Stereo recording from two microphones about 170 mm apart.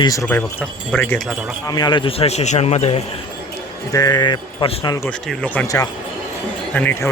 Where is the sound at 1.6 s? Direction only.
25° left (ahead or behind).